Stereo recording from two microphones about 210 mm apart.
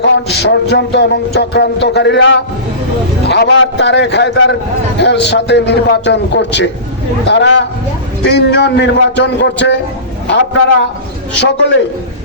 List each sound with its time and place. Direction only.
0.0 s a man's voice: 50° left (ahead or behind)
11.3 s a man's voice: 60° left (ahead or behind)